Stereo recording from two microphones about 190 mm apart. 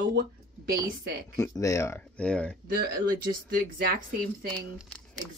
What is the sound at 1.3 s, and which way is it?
Speech, 20° left (ahead or behind).